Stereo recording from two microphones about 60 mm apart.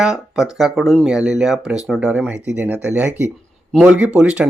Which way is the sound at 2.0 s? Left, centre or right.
Right.